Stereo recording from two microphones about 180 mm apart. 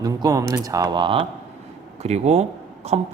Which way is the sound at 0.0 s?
20° right (ahead or behind).